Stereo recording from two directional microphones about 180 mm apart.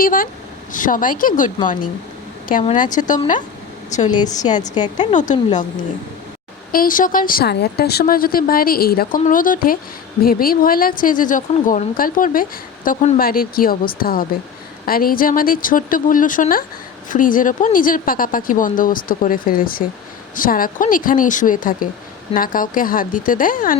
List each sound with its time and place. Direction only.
0.0 s speech: 50° left (ahead or behind)
2.9 s speech: 45° left (ahead or behind)
4.1 s a woman's voice: 20° left (ahead or behind)
5.1 s a woman's voice: 40° left (ahead or behind)